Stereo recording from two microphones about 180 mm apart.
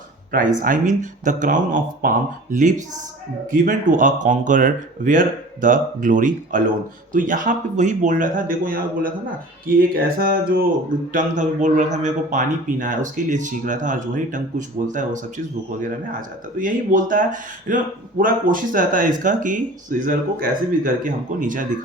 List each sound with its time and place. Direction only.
0.3 s speech: 50° right (ahead or behind)
16.6 s speech: 50° right (ahead or behind)